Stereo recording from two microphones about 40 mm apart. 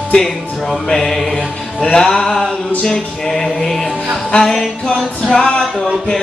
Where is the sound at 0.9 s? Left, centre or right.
Centre.